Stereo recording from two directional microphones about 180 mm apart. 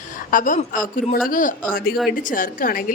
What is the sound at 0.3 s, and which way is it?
A woman's voice, 50° left (ahead or behind).